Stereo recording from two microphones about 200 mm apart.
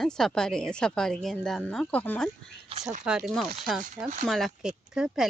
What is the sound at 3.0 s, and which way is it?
Speech, centre (ahead or behind).